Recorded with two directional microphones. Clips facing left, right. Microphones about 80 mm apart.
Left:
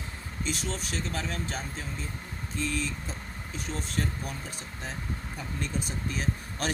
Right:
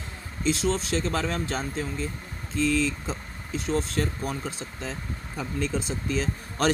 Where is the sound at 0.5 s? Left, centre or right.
Right.